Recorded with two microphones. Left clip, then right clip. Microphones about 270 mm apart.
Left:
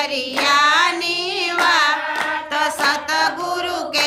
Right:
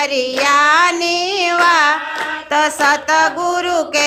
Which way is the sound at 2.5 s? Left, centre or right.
Centre.